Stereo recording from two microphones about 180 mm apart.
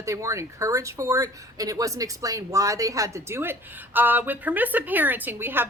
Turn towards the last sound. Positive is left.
turn(degrees=-10)  # may be behind; listen again after turning